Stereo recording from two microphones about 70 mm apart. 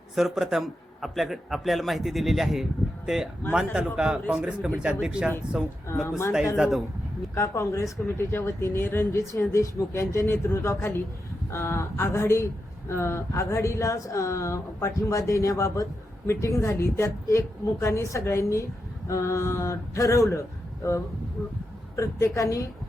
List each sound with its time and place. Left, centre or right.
0.2 s a man's voice: centre
3.8 s speech: centre
5.9 s speech: left
6.6 s a man's voice: centre
7.3 s speech: left
21.9 s speech: left